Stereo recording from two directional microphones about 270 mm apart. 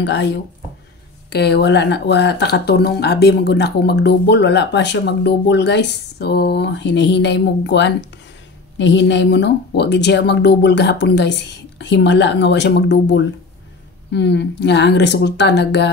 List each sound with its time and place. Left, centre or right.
0.0 s speech: left
1.3 s speech: left